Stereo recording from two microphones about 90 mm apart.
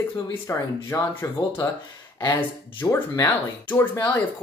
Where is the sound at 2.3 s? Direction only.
20° left (ahead or behind).